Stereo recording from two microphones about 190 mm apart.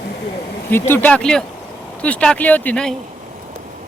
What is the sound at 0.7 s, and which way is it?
Speech, 10° left (ahead or behind).